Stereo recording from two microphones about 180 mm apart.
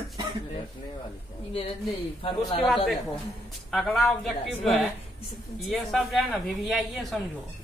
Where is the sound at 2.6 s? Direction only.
Centre (ahead or behind).